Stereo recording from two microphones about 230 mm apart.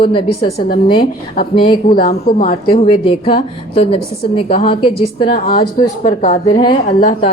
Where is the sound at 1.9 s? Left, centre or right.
Left.